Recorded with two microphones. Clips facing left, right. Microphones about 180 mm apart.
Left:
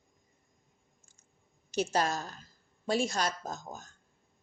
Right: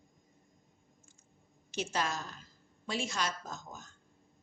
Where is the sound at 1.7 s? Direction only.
40° left (ahead or behind).